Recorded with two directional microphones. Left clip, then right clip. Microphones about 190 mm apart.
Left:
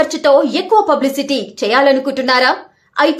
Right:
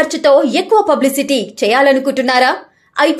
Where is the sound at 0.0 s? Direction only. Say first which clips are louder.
Right 1 dB; centre (ahead or behind).